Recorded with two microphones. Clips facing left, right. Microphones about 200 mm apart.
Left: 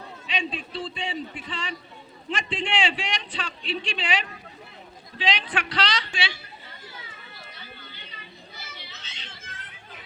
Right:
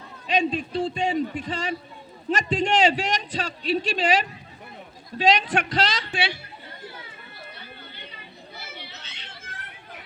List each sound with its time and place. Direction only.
0.3 s a man's voice: 45° right (ahead or behind)
6.8 s children playing: 55° right (ahead or behind)